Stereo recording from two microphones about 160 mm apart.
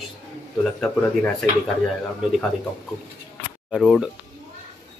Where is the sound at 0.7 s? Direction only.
5° left (ahead or behind).